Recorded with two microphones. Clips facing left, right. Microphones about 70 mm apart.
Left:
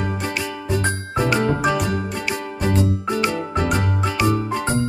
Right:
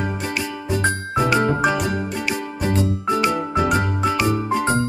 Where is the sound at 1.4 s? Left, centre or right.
Centre.